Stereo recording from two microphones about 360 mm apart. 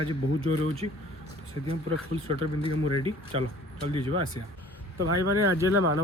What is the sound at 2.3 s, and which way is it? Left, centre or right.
Speech, centre.